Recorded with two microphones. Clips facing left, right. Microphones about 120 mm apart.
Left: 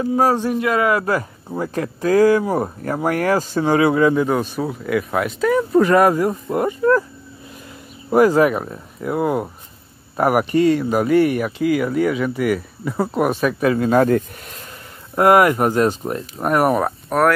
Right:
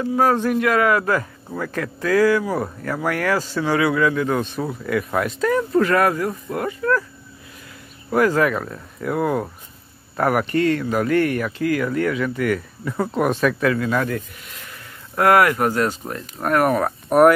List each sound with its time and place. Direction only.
0.0 s speech: 30° left (ahead or behind)
2.2 s speech: 40° left (ahead or behind)
3.7 s speech: 30° left (ahead or behind)
4.6 s speech: 5° left (ahead or behind); by 7.1 s 25° left (ahead or behind)
8.1 s speech: 20° left (ahead or behind)
13.6 s speech: 25° left (ahead or behind)
15.1 s speech: 20° left (ahead or behind)
17.1 s speech: 10° right (ahead or behind)